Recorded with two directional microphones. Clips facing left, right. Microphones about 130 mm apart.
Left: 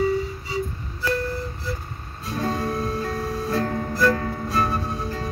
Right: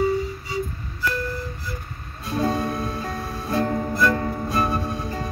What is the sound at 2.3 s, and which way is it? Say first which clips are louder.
Music: right 2 dB; 15° right (ahead or behind).